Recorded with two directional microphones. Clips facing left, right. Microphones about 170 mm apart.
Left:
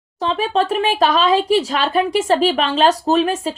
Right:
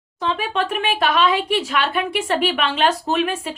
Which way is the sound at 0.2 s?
35° left (ahead or behind).